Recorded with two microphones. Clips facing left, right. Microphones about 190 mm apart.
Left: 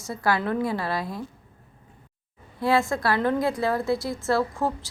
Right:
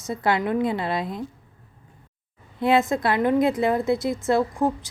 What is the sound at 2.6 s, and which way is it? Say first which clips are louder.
A woman's voice: right 3 dB; 20° right (ahead or behind).